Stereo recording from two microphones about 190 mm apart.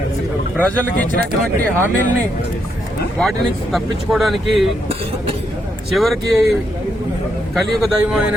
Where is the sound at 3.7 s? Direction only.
Centre (ahead or behind).